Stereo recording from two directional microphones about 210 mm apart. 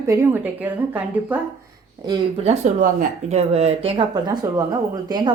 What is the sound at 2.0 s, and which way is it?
Speech, 30° right (ahead or behind).